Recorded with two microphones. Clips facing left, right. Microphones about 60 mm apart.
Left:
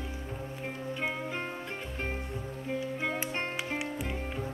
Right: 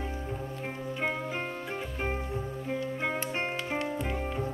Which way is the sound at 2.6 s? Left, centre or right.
Centre.